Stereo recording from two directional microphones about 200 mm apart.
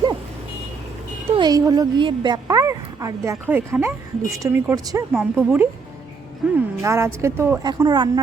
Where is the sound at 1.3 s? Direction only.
20° right (ahead or behind).